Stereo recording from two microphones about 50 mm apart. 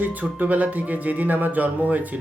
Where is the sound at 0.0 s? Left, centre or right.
Right.